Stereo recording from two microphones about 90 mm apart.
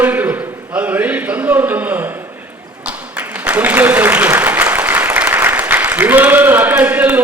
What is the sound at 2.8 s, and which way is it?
Applause, 20° right (ahead or behind).